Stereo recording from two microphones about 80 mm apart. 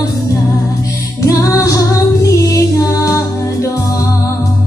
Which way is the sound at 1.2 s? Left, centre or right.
Left.